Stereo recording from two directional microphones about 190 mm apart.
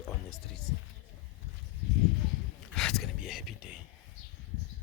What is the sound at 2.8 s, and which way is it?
Speech, centre (ahead or behind).